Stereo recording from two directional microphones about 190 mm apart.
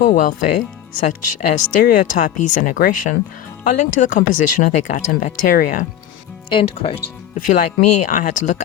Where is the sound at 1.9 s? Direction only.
40° left (ahead or behind).